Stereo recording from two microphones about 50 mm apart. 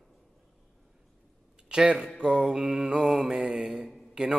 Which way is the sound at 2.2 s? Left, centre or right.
Centre.